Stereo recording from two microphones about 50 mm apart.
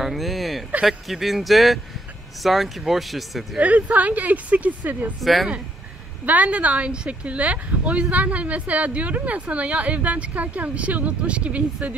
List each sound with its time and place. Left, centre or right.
0.0 s a sound: centre
0.8 s speech: centre
3.5 s speech: right
5.2 s speech: centre
6.2 s speech: right